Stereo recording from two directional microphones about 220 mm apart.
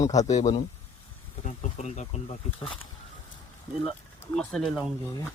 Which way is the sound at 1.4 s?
30° left (ahead or behind).